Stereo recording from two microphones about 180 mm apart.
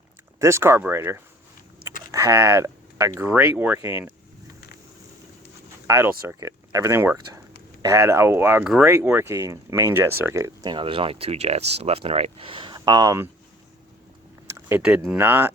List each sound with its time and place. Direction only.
0.3 s speech: 15° right (ahead or behind)
6.2 s speech: 15° right (ahead or behind)
14.5 s speech: 10° right (ahead or behind)